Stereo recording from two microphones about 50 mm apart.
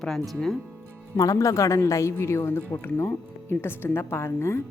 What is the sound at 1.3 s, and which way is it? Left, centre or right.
Speech, left.